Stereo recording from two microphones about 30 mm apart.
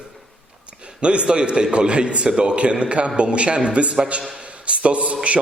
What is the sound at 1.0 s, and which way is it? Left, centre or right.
A man's voice, right.